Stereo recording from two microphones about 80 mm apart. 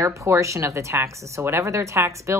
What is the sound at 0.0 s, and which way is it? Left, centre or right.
A woman's voice, right.